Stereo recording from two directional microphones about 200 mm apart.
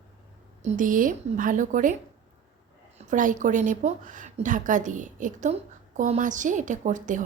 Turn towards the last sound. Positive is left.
turn(degrees=-40)  # may be behind; listen again after turning